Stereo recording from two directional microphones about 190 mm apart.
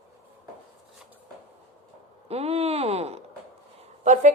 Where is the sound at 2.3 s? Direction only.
30° right (ahead or behind).